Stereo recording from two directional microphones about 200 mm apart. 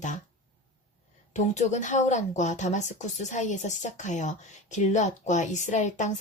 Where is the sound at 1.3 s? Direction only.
35° left (ahead or behind).